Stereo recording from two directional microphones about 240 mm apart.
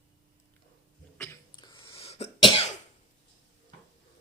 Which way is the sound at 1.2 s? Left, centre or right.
Centre.